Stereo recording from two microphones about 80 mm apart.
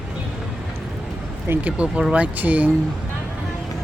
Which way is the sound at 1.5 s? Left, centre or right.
Centre.